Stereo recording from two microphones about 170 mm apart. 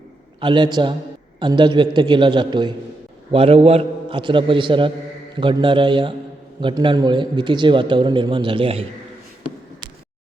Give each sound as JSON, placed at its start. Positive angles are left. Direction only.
{"t": 0.3, "sound": "a man's voice", "side_deg": -30}